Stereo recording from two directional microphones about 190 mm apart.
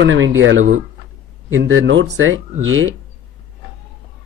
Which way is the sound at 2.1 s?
90° right.